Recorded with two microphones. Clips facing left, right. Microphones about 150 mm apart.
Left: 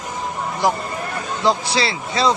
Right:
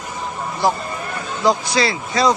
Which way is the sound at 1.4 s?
30° left (ahead or behind).